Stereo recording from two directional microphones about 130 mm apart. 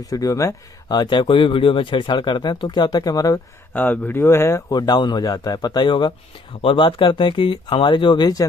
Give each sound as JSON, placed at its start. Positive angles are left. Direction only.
{"t": 0.1, "sound": "speech", "side_deg": 25}
{"t": 3.7, "sound": "speech", "side_deg": 10}